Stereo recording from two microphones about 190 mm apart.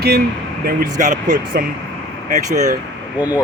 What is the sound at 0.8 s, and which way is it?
Speech, 40° right (ahead or behind).